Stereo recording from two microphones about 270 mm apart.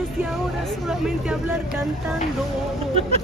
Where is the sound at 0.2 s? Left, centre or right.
Centre.